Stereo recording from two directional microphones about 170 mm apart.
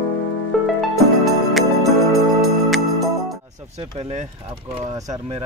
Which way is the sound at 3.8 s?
40° right (ahead or behind).